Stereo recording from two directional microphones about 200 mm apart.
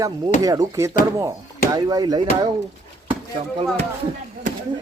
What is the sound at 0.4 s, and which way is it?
Speech, 20° right (ahead or behind).